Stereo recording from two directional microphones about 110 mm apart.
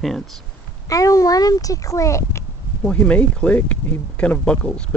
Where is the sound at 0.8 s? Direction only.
30° left (ahead or behind).